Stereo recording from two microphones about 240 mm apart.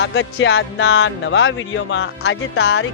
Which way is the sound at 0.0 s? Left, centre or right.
Left.